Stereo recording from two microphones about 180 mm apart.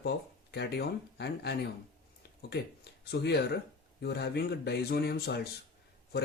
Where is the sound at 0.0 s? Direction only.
65° left (ahead or behind).